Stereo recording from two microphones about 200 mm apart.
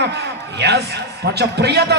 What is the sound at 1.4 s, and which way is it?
Speech, 55° right (ahead or behind).